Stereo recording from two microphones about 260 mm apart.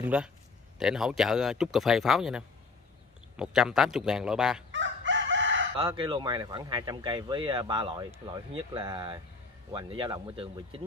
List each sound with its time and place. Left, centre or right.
0.0 s speech: centre
4.7 s chicken: right
5.8 s speech: centre